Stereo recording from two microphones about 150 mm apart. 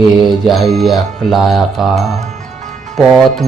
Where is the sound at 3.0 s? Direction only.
Centre (ahead or behind).